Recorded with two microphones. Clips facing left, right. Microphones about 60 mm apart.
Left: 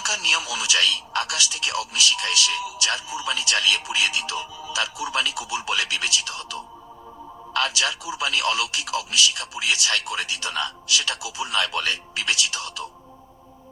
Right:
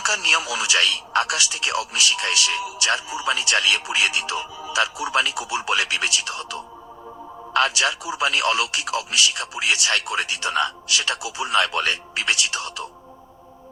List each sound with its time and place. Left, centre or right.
0.0 s a man's voice: right